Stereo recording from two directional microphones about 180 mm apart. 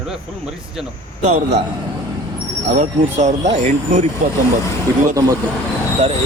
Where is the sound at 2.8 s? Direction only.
40° right (ahead or behind).